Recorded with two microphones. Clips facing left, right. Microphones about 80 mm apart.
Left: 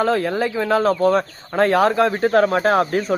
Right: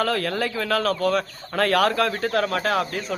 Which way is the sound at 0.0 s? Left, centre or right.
Left.